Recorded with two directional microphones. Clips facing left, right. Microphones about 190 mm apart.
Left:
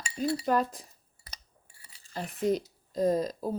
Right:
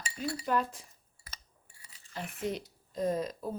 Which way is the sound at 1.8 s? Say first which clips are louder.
Left 4 dB; 35° left (ahead or behind).